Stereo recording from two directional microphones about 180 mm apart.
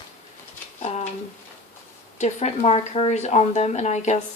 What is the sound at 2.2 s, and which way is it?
Speech, 40° left (ahead or behind).